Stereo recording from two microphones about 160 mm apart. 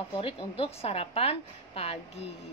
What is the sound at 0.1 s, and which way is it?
A woman's voice, 35° left (ahead or behind).